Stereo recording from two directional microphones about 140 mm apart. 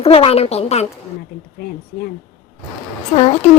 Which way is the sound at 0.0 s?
45° left (ahead or behind).